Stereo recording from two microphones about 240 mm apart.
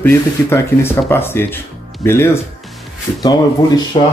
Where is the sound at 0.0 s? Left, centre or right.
Centre.